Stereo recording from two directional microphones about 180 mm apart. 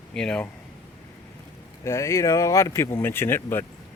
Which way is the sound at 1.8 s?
15° left (ahead or behind).